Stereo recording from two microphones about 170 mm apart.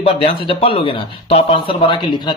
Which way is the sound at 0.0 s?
35° left (ahead or behind).